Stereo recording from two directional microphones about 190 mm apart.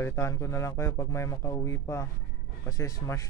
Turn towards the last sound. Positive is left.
turn(degrees=15)  # may be behind; listen again after turning